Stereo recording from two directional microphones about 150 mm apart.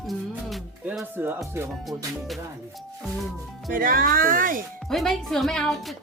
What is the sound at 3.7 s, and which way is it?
Speech, 70° right (ahead or behind).